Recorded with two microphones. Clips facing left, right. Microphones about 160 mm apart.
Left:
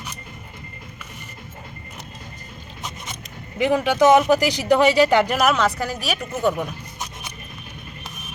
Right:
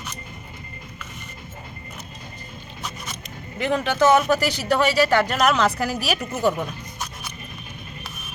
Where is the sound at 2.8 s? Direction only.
20° left (ahead or behind).